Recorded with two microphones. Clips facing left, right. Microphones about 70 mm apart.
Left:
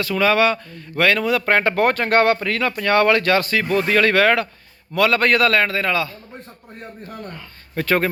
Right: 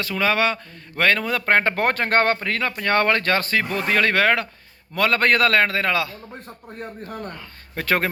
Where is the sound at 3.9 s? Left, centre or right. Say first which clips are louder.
Left 2 dB; centre.